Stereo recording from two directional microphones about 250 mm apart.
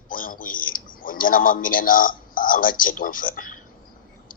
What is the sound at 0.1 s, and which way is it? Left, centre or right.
A man's voice, left.